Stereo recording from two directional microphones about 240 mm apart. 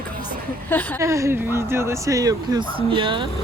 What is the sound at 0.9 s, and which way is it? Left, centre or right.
Speech, centre.